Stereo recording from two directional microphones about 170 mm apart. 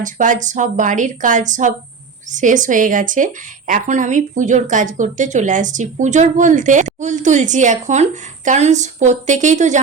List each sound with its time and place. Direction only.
0.0 s speech: 50° right (ahead or behind)